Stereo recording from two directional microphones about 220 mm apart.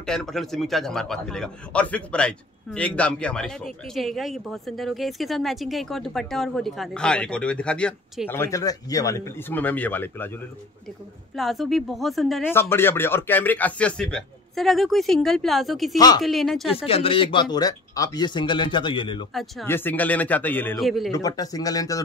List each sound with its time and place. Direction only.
0.0 s a man's voice: centre (ahead or behind)
11.3 s a man's voice: centre (ahead or behind)
16.7 s speech: 25° left (ahead or behind)
19.3 s a man's voice: 10° left (ahead or behind)
21.1 s a man's voice: 15° left (ahead or behind)